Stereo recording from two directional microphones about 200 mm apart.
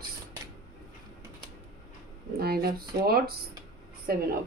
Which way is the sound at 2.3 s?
50° right (ahead or behind).